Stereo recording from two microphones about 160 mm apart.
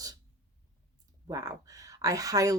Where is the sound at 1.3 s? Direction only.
20° right (ahead or behind).